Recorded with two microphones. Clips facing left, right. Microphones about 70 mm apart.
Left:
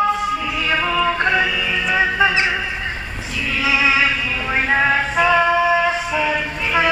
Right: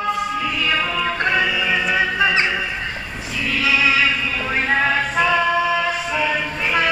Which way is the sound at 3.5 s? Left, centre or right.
Centre.